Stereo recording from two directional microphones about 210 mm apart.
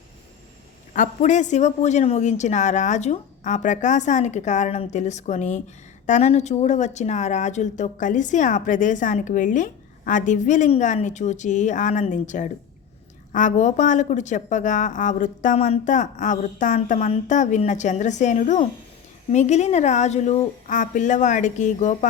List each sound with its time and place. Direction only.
0.9 s speech: 35° left (ahead or behind)